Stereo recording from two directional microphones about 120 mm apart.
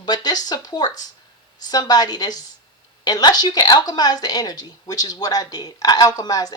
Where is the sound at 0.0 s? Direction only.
35° left (ahead or behind).